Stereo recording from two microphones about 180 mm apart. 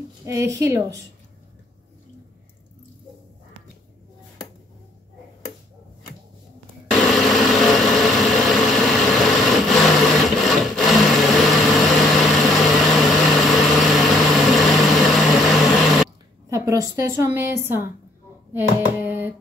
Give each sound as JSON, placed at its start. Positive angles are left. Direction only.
{"t": 0.2, "sound": "a woman's voice", "side_deg": -15}
{"t": 6.9, "sound": "vehicle", "side_deg": 0}
{"t": 16.4, "sound": "a woman's voice", "side_deg": -15}
{"t": 18.5, "sound": "a sound", "side_deg": -10}